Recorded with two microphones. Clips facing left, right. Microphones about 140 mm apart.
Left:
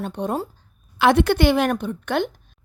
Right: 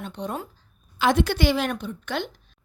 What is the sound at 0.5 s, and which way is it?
A woman's voice, 65° left (ahead or behind).